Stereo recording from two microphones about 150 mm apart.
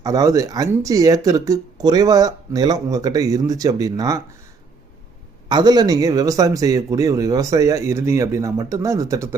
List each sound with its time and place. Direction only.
0.0 s speech: 25° right (ahead or behind)
5.5 s speech: 30° right (ahead or behind)